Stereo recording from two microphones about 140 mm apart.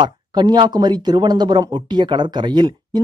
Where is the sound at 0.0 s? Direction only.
30° right (ahead or behind).